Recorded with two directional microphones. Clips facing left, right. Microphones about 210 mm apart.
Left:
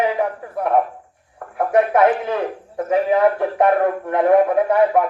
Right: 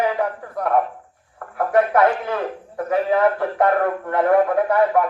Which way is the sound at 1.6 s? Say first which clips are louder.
Left 1 dB; 20° left (ahead or behind).